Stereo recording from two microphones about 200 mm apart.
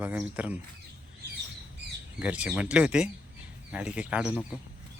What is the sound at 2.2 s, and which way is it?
Speech, 5° right (ahead or behind).